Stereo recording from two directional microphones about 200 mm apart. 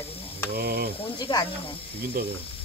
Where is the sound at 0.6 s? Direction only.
50° right (ahead or behind).